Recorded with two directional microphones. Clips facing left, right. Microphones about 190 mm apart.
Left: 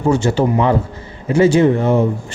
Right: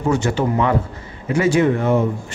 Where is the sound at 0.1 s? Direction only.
30° left (ahead or behind).